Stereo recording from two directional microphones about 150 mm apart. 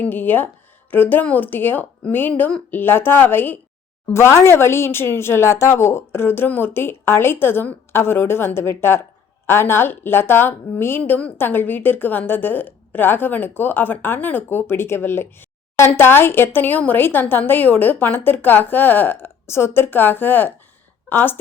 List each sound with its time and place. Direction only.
0.0 s a woman's voice: 15° left (ahead or behind)